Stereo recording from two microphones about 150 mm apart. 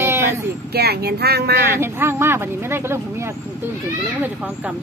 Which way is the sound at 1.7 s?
15° right (ahead or behind).